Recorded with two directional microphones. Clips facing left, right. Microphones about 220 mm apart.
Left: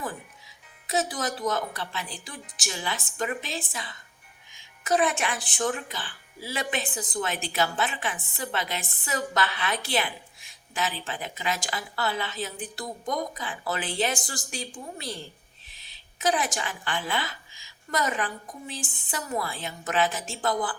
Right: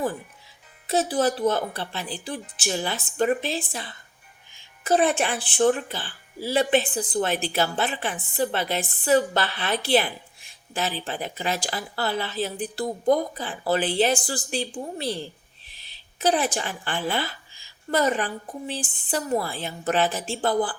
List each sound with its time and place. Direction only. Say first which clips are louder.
0.9 s speech: right 6 dB; 30° right (ahead or behind)
16.2 s speech: right 4 dB; 35° right (ahead or behind)